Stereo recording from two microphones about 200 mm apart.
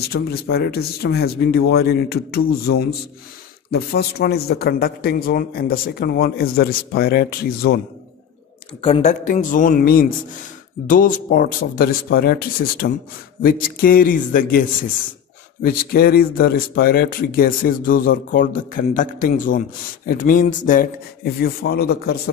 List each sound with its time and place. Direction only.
0.1 s speech: 50° left (ahead or behind)
3.7 s speech: 55° left (ahead or behind)
8.8 s speech: 30° left (ahead or behind); by 22.3 s 50° left (ahead or behind)